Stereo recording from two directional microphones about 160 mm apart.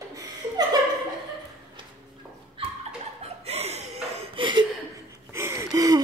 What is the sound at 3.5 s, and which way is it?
Chuckle, 40° right (ahead or behind).